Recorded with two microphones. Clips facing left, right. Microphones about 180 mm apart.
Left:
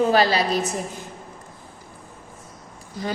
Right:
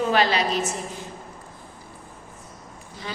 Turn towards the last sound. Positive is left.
turn(degrees=40)  # may be behind; listen again after turning